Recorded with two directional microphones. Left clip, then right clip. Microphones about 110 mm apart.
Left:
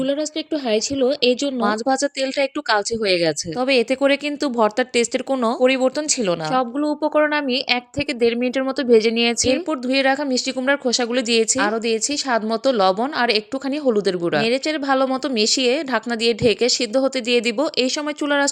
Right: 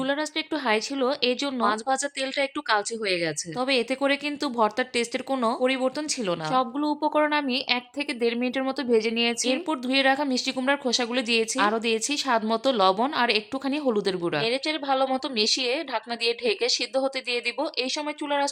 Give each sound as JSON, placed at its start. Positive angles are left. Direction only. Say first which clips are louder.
{"t": 0.0, "sound": "speech", "louder": "left 5 dB", "side_deg": 25}
{"t": 9.5, "sound": "a woman's voice", "louder": "left 6 dB", "side_deg": 25}
{"t": 11.9, "sound": "a woman's voice", "louder": "left 4 dB", "side_deg": 20}